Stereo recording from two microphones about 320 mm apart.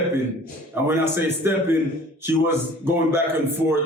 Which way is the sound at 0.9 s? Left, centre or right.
Centre.